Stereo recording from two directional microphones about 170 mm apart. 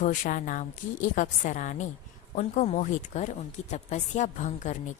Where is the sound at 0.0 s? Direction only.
50° left (ahead or behind).